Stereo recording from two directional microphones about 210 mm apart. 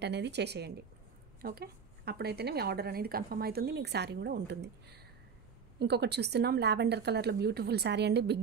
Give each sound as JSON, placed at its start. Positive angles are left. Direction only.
{"t": 0.0, "sound": "a woman's voice", "side_deg": -55}